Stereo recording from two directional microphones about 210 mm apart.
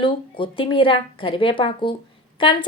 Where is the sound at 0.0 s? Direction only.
25° left (ahead or behind).